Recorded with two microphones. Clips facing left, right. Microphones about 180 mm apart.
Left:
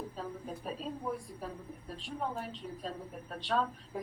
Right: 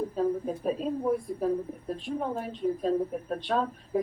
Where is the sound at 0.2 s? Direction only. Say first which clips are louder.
Right 13 dB; 50° right (ahead or behind).